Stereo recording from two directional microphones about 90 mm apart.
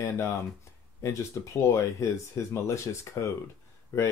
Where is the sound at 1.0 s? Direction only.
30° left (ahead or behind).